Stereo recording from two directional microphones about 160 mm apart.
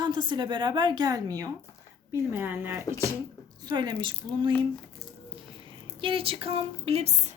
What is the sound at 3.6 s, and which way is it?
Speech, 25° right (ahead or behind).